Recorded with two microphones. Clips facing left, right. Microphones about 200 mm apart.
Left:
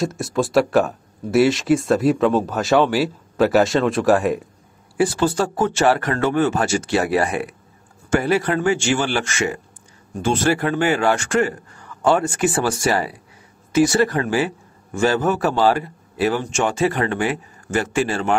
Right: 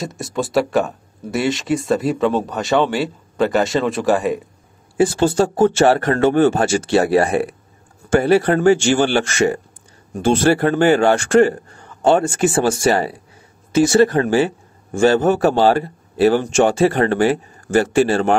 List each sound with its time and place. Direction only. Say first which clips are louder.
0.0 s speech: left 2 dB; centre (ahead or behind)
4.9 s a man's voice: right 3 dB; 25° right (ahead or behind)